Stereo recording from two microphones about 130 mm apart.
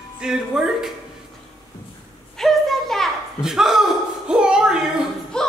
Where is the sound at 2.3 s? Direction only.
Centre (ahead or behind).